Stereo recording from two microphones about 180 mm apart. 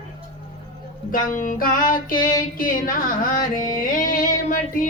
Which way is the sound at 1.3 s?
45° left (ahead or behind).